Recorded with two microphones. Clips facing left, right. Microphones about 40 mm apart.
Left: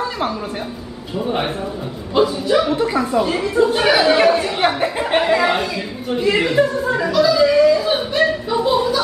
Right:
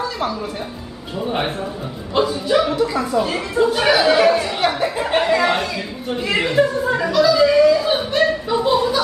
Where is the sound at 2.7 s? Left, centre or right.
Left.